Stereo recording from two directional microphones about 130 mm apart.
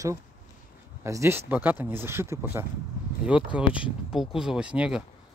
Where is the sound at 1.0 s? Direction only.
20° right (ahead or behind).